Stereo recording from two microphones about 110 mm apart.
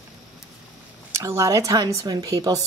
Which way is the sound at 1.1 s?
25° right (ahead or behind).